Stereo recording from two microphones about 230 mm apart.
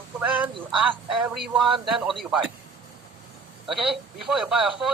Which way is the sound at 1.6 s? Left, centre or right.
Centre.